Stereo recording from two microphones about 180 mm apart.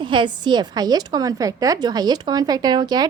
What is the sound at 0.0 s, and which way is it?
A woman's voice, 25° right (ahead or behind).